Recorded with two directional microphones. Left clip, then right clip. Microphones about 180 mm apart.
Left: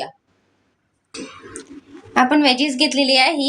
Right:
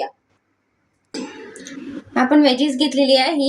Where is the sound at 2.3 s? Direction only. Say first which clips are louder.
Right 1 dB; 30° left (ahead or behind).